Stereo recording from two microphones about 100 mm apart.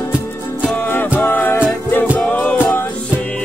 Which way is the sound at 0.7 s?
20° left (ahead or behind).